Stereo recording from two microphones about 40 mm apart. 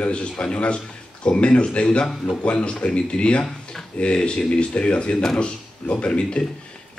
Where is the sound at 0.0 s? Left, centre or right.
Left.